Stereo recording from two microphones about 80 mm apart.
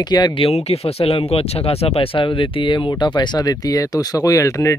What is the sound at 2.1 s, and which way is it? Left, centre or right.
Speech, left.